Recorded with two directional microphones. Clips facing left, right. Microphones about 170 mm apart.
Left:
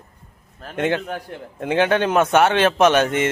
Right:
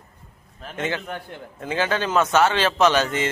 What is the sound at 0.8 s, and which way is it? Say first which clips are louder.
A man's voice: left 6 dB; 55° left (ahead or behind).